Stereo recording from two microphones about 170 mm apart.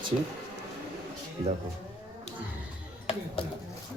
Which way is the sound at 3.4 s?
35° left (ahead or behind).